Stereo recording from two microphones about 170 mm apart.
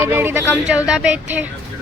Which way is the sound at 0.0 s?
15° right (ahead or behind).